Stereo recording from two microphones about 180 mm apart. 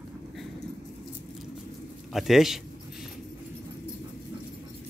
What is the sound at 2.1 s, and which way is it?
Speech, centre (ahead or behind).